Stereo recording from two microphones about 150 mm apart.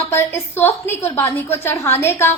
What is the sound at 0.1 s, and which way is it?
A woman's voice, 15° left (ahead or behind).